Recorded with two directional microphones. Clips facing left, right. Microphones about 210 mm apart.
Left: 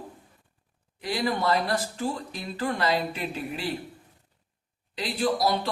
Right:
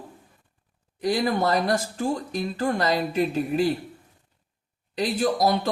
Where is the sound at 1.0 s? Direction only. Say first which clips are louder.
Right 4 dB; 45° right (ahead or behind).